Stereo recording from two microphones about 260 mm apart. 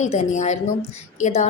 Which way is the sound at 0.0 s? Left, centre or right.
Left.